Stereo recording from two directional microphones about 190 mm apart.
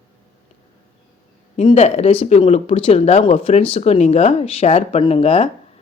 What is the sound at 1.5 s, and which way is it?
Speech, 35° left (ahead or behind).